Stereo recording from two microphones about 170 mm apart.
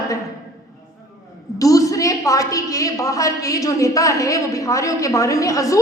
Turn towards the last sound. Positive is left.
turn(degrees=20)  # may be behind; listen again after turning